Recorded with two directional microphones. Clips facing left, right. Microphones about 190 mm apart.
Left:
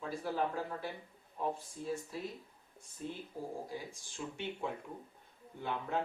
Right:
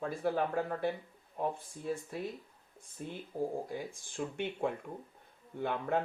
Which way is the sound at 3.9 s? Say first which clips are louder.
Right 5 dB; 55° right (ahead or behind).